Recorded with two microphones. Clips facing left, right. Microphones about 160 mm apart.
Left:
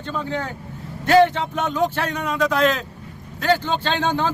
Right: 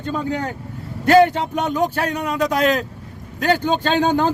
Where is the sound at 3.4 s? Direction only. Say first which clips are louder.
Right 2 dB; 40° right (ahead or behind).